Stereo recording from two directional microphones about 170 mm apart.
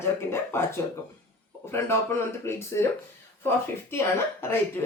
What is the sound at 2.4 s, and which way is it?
Speech, 15° left (ahead or behind).